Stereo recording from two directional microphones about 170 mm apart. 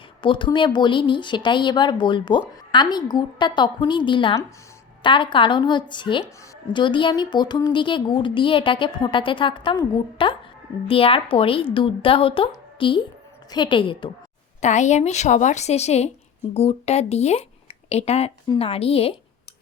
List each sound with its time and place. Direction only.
0.2 s a woman's voice: 30° left (ahead or behind)
14.6 s a woman's voice: 45° left (ahead or behind)